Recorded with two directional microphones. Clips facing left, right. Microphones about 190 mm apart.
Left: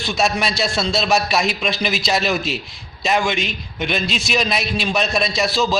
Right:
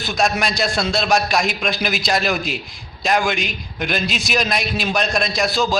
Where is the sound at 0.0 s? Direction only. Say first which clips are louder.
Even; centre (ahead or behind).